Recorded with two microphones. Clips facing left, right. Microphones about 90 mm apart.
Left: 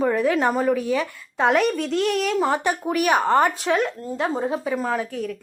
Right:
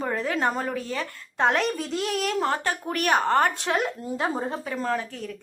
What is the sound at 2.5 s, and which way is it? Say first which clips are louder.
A woman's voice: left 5 dB; 15° left (ahead or behind).